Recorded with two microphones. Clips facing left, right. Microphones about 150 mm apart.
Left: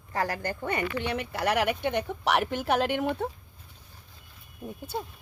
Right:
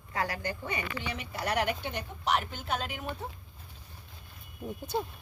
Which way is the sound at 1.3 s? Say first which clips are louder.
Left 3 dB; 70° left (ahead or behind).